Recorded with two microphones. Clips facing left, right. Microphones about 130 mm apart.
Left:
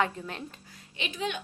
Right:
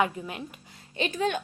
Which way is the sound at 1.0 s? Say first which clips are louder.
Right 6 dB; 45° right (ahead or behind).